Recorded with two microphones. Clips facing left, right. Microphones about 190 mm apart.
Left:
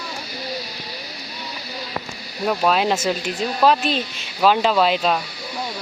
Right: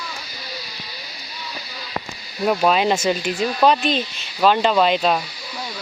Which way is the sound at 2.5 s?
5° right (ahead or behind).